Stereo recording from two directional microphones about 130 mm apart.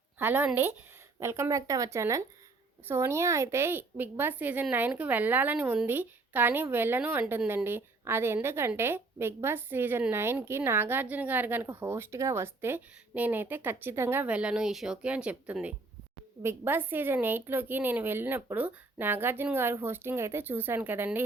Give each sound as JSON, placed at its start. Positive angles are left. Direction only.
{"t": 0.2, "sound": "a woman's voice", "side_deg": -15}